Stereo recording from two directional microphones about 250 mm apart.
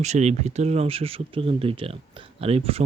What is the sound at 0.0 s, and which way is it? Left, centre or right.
Speech, right.